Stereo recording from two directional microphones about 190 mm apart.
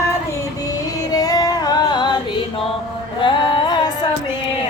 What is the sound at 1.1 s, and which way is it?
Female singing, 20° left (ahead or behind).